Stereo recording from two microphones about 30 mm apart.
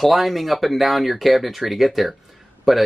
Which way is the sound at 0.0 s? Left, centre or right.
Centre.